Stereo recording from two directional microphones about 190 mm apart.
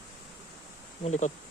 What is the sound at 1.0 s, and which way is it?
Speech, 35° left (ahead or behind).